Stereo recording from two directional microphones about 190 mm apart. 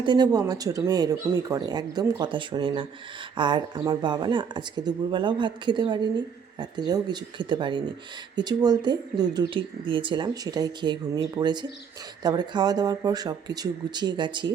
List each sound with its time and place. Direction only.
0.0 s speech: 25° right (ahead or behind)